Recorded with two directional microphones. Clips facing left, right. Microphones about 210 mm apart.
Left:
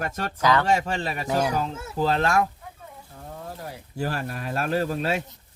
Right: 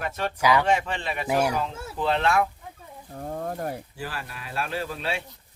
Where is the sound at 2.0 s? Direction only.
40° left (ahead or behind).